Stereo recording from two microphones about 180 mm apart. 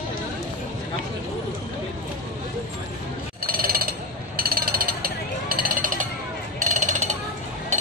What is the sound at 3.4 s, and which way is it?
Jackhammer, 55° right (ahead or behind).